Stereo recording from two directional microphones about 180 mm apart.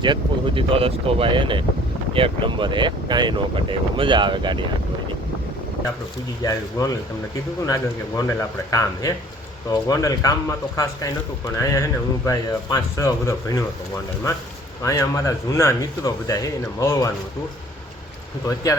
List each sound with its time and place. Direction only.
0.0 s speech: 30° right (ahead or behind)
6.4 s speech: 20° left (ahead or behind)
11.6 s speech: 15° left (ahead or behind)
14.8 s speech: 15° left (ahead or behind)
18.4 s speech: 15° left (ahead or behind)